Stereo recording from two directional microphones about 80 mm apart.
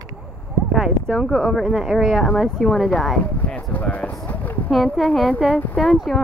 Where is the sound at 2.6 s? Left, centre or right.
Centre.